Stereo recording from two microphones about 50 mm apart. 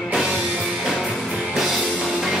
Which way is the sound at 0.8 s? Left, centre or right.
Centre.